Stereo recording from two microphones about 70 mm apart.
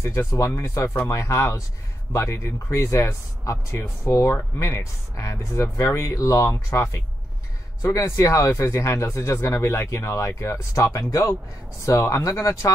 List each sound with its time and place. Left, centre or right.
0.0 s speech: left
0.6 s speech: left